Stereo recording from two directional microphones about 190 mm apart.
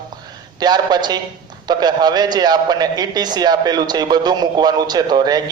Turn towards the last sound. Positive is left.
turn(degrees=-20)  # may be behind; listen again after turning